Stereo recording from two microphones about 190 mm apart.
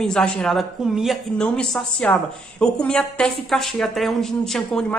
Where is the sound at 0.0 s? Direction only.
5° left (ahead or behind).